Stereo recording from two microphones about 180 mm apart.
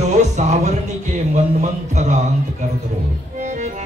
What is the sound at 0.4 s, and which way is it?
Music, 40° right (ahead or behind).